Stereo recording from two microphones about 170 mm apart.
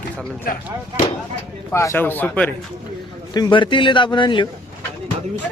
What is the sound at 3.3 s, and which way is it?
A man's voice, 25° left (ahead or behind).